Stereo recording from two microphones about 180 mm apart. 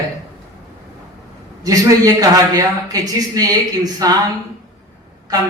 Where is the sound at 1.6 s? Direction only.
20° right (ahead or behind).